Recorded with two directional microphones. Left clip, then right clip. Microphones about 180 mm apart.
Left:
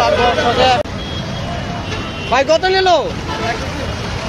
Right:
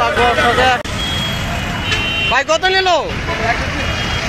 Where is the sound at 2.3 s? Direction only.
10° right (ahead or behind).